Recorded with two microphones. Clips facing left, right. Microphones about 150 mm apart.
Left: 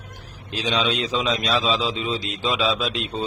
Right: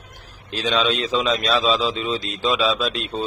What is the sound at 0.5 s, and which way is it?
A man's voice, 15° left (ahead or behind).